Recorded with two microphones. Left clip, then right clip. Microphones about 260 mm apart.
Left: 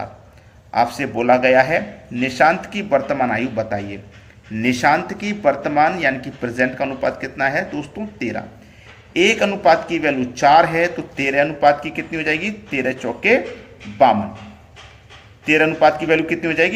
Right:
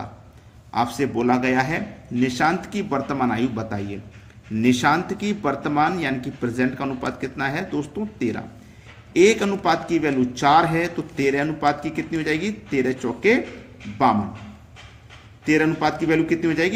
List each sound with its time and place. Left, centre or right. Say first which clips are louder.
0.7 s speech: left 4 dB; centre
15.4 s speech: left 6 dB; centre